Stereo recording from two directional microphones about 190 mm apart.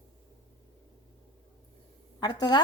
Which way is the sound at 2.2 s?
20° left (ahead or behind).